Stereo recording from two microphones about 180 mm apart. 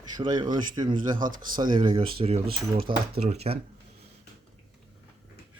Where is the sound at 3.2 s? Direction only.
35° right (ahead or behind).